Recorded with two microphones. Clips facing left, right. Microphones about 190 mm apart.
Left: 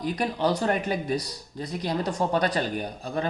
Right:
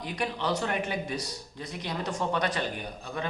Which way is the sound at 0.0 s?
40° left (ahead or behind).